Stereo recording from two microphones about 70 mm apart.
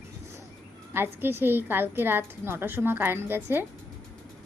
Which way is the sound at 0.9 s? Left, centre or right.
Right.